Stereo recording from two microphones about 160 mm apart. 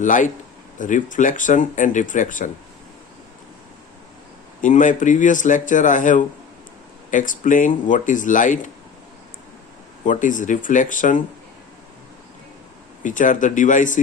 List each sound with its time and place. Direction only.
0.0 s speech: 50° left (ahead or behind)
4.6 s speech: 55° left (ahead or behind)
10.1 s speech: 55° left (ahead or behind)
13.0 s speech: 55° left (ahead or behind)